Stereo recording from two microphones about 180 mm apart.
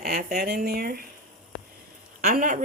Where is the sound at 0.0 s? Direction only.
55° right (ahead or behind).